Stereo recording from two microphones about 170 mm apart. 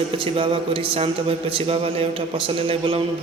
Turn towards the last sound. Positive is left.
turn(degrees=-30)  # may be behind; listen again after turning